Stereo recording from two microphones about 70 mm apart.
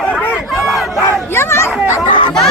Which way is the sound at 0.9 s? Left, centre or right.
Left.